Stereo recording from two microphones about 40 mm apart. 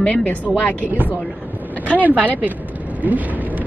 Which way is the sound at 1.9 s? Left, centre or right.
Right.